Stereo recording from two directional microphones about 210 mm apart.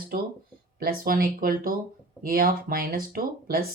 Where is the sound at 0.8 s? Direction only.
45° right (ahead or behind).